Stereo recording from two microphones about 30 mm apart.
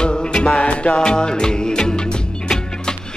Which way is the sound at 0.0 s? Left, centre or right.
Left.